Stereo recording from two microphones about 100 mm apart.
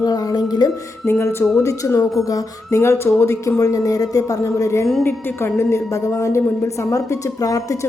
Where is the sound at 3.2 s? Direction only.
30° left (ahead or behind).